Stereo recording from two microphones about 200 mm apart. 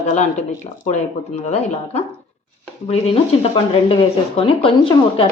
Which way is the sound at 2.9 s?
30° left (ahead or behind).